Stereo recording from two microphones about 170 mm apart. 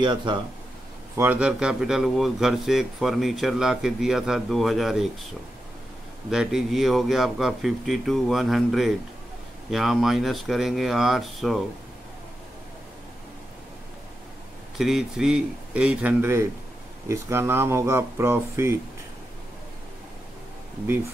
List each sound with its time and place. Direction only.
0.0 s speech: 25° right (ahead or behind)
1.1 s speech: 10° right (ahead or behind)
6.3 s speech: centre (ahead or behind)
14.8 s speech: centre (ahead or behind)